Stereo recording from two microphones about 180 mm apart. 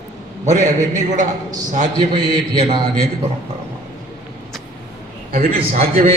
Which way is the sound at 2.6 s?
25° right (ahead or behind).